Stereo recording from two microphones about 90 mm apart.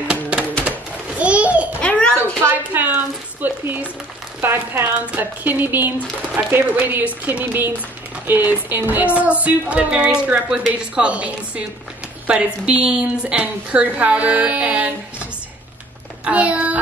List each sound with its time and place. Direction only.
0.1 s music: 15° right (ahead or behind)
1.2 s babbling: 15° right (ahead or behind)
1.8 s a sound: 15° left (ahead or behind)
2.4 s a sound: 25° right (ahead or behind)
4.4 s speech: 25° right (ahead or behind)
16.3 s speech: 15° right (ahead or behind)